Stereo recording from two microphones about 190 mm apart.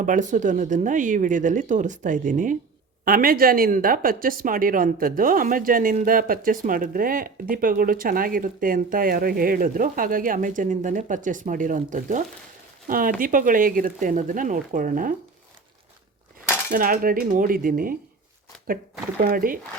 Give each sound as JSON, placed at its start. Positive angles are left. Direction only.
{"t": 0.0, "sound": "a woman's voice", "side_deg": -40}
{"t": 16.7, "sound": "a woman's voice", "side_deg": -50}
{"t": 19.2, "sound": "a woman's voice", "side_deg": -50}